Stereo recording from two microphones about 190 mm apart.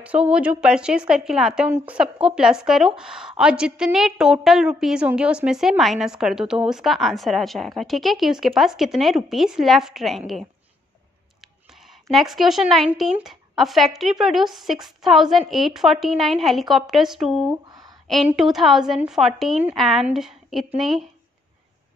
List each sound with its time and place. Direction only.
0.0 s a woman's voice: 5° right (ahead or behind)
12.1 s a woman's voice: centre (ahead or behind)
17.6 s a sound: 20° right (ahead or behind)
18.0 s a woman's voice: centre (ahead or behind)